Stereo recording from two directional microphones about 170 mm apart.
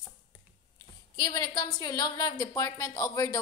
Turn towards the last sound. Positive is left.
turn(degrees=20)  # may be behind; listen again after turning